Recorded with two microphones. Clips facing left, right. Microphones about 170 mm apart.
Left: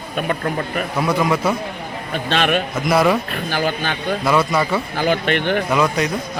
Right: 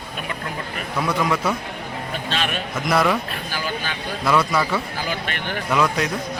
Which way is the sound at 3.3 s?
55° left (ahead or behind).